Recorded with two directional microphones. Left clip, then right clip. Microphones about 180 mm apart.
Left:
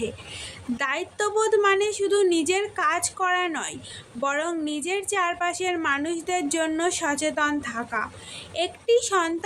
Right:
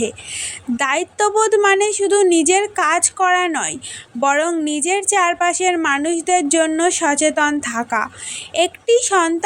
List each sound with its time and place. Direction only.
0.0 s a woman's voice: 35° right (ahead or behind)